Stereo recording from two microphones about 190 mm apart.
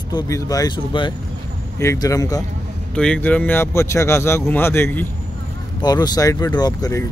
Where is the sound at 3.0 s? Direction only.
5° left (ahead or behind).